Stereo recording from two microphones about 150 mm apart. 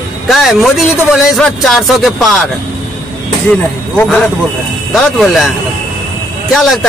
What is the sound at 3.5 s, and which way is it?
Speech, 5° left (ahead or behind).